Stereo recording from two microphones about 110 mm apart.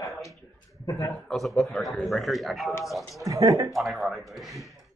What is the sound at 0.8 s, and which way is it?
Speech, 30° left (ahead or behind).